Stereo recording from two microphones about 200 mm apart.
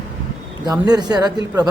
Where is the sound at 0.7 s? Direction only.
20° right (ahead or behind).